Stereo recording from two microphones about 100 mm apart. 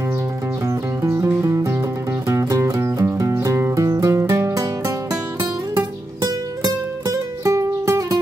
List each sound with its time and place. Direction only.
0.7 s music: 30° right (ahead or behind)
6.6 s music: 40° right (ahead or behind)
7.5 s music: 30° right (ahead or behind)